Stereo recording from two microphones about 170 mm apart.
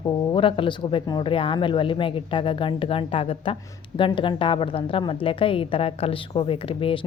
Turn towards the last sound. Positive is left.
turn(degrees=35)  # may be behind; listen again after turning